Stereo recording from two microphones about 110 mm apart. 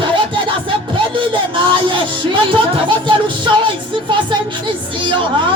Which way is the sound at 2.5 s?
50° right (ahead or behind).